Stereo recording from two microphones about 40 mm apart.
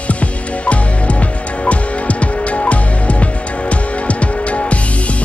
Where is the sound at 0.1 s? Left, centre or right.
Left.